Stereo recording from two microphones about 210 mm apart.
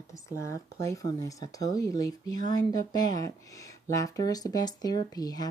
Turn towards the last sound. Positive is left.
turn(degrees=20)  # may be behind; listen again after turning